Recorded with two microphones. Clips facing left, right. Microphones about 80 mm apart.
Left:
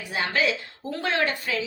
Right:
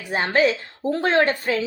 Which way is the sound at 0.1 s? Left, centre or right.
Right.